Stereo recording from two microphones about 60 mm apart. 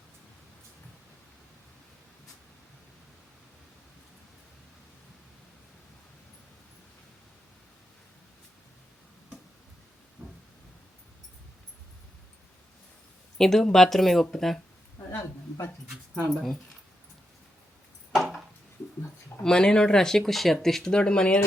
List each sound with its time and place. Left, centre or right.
13.4 s speech: centre
15.1 s a sound: left
16.3 s speech: centre
19.4 s speech: centre